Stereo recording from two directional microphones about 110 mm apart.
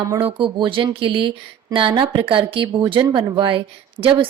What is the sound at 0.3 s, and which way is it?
A woman's voice, 50° right (ahead or behind).